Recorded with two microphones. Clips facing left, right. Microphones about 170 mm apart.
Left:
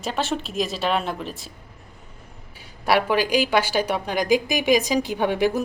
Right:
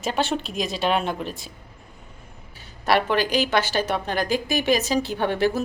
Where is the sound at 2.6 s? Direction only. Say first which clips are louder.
Left 1 dB; 10° left (ahead or behind).